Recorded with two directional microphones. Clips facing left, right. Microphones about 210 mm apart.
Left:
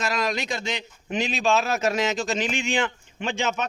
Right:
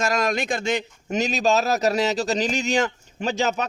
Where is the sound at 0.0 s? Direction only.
45° right (ahead or behind).